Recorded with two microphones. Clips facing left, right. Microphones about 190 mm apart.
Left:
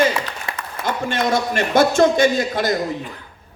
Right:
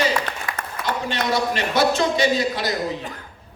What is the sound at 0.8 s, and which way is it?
A man's voice, 50° left (ahead or behind).